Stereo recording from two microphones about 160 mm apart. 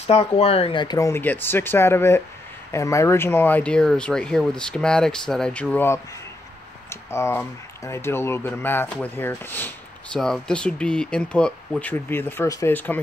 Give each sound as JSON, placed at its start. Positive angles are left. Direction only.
{"t": 0.0, "sound": "speech", "side_deg": 40}